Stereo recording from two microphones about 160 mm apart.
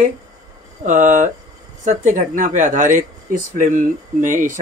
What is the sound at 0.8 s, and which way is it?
Speech, 50° right (ahead or behind).